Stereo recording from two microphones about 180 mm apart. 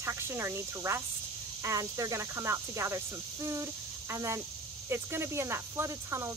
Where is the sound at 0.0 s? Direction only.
15° right (ahead or behind).